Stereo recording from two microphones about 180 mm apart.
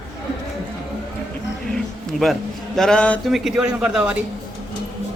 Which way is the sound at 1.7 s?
Centre (ahead or behind).